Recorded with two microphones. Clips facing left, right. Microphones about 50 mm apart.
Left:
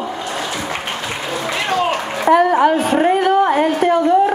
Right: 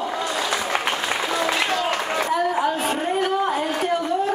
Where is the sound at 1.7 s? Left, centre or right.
Left.